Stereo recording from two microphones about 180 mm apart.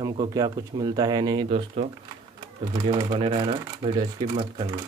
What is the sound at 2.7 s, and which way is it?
Speech, 25° right (ahead or behind).